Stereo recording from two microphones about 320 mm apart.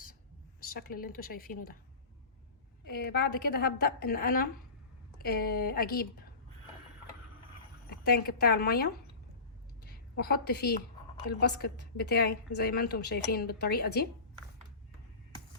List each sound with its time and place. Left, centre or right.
0.6 s a woman's voice: left
2.9 s a woman's voice: left
7.9 s a woman's voice: left
9.8 s a sound: left
11.3 s a woman's voice: left